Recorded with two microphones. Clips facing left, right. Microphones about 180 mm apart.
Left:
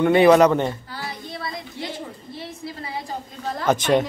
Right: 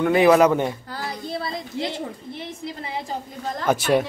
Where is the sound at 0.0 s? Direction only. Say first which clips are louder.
Left 2 dB; centre (ahead or behind).